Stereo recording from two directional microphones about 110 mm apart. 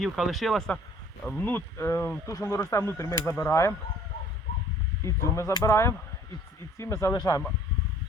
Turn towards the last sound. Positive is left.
turn(degrees=35)  # may be behind; listen again after turning